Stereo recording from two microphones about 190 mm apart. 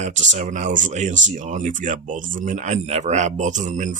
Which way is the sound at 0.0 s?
40° right (ahead or behind).